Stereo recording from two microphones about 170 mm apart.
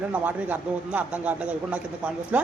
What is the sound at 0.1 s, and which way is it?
A man's voice, 10° right (ahead or behind).